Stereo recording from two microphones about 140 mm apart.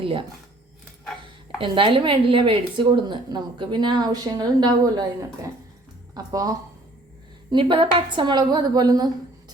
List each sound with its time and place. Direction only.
0.0 s speech: 40° right (ahead or behind)
1.5 s speech: 35° right (ahead or behind)
7.5 s speech: 35° right (ahead or behind)